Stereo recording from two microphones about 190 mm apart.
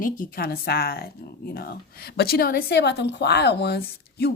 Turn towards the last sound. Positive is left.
turn(degrees=55)  # may be behind; listen again after turning